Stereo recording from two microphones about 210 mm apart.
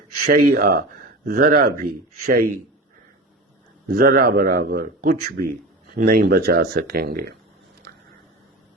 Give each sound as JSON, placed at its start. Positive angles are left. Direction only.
{"t": 0.3, "sound": "a man's voice", "side_deg": -45}
{"t": 3.8, "sound": "a man's voice", "side_deg": -45}